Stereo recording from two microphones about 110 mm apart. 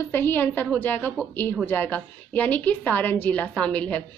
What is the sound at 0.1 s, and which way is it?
A woman's voice, 20° left (ahead or behind).